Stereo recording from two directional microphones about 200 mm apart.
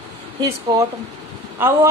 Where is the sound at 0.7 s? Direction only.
20° right (ahead or behind).